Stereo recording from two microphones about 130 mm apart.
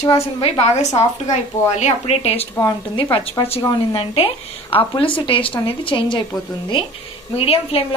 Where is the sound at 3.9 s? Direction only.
45° left (ahead or behind).